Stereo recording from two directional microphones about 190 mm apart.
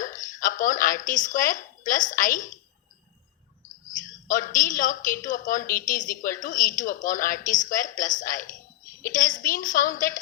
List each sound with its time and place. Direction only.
0.0 s speech: 45° left (ahead or behind)
4.3 s a woman's voice: 45° left (ahead or behind)